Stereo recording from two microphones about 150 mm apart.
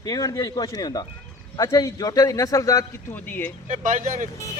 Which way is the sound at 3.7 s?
60° right (ahead or behind).